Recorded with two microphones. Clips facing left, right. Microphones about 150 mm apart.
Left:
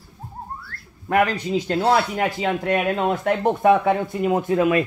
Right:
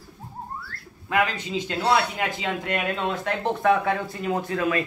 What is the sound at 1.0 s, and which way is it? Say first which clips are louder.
Speech: left 5 dB; 45° left (ahead or behind).